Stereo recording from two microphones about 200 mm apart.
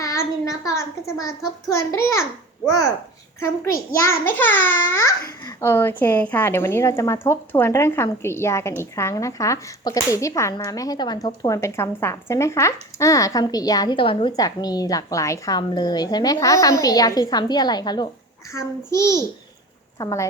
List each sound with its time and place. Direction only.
0.0 s child singing: 15° left (ahead or behind)
1.9 s a child's voice: 15° left (ahead or behind)